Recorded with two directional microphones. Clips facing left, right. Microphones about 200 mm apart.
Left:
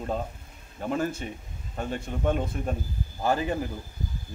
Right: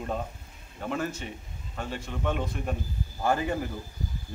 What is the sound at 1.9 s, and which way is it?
Speech, 40° left (ahead or behind).